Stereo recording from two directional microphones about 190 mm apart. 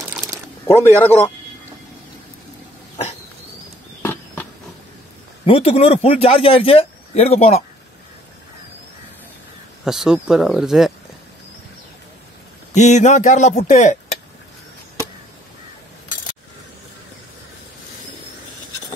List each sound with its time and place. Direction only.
0.7 s a man's voice: 10° left (ahead or behind)
4.0 s a sound: 10° left (ahead or behind)
5.4 s a man's voice: 30° left (ahead or behind)
9.8 s speech: 5° right (ahead or behind)
12.7 s a man's voice: 40° left (ahead or behind)